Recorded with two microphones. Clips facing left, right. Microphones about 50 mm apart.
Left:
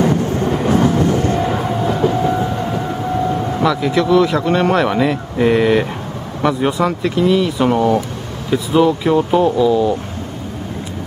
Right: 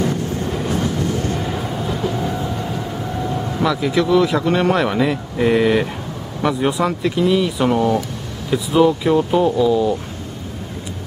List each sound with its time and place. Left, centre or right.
0.0 s music: left
3.6 s speech: centre